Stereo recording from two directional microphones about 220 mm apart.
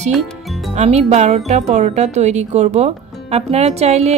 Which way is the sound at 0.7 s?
30° right (ahead or behind).